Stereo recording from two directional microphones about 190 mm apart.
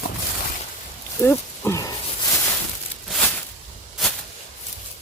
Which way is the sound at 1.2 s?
15° left (ahead or behind).